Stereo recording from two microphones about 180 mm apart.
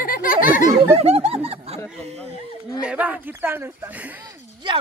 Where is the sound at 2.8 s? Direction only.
10° right (ahead or behind).